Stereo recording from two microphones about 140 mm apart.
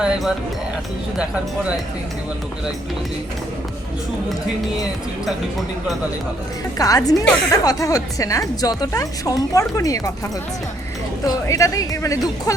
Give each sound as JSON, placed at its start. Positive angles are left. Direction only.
{"t": 0.0, "sound": "speech", "side_deg": -5}
{"t": 4.8, "sound": "speech", "side_deg": 0}
{"t": 6.7, "sound": "a woman's voice", "side_deg": 25}
{"t": 11.3, "sound": "a woman's voice", "side_deg": 25}